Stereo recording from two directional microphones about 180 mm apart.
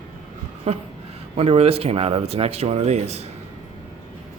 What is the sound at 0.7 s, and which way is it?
Speech, 35° right (ahead or behind).